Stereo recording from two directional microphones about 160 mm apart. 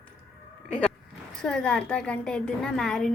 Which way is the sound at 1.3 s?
5° left (ahead or behind).